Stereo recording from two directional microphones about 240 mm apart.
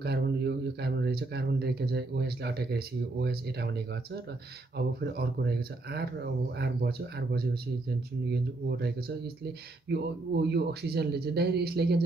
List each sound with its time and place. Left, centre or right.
0.0 s speech: right